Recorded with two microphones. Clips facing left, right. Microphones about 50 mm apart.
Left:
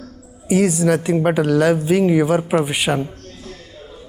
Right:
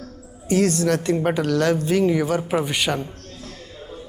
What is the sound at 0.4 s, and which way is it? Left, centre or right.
Speech, centre.